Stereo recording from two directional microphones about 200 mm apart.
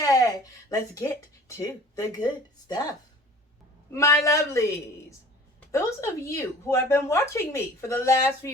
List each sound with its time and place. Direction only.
0.0 s speech: 15° left (ahead or behind)
4.2 s speech: 15° left (ahead or behind)
5.7 s speech: 15° left (ahead or behind)